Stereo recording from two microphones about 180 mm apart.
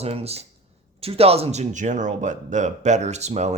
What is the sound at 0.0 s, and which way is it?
A man's voice, 35° right (ahead or behind).